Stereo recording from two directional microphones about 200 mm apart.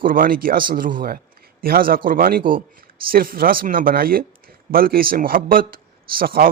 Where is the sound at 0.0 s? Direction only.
45° right (ahead or behind).